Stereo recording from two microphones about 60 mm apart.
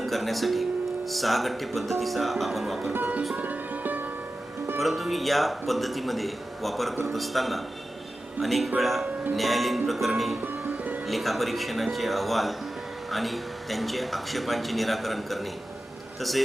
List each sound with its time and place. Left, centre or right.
0.0 s speech: centre
2.9 s music: right
4.8 s speech: centre